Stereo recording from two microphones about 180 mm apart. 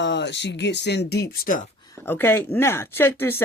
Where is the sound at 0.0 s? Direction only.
75° left (ahead or behind); by 1.6 s 55° left (ahead or behind).